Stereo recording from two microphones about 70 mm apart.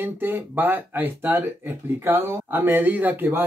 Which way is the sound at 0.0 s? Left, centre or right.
Right.